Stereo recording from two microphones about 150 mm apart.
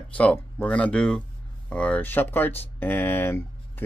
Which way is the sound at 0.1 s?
10° left (ahead or behind).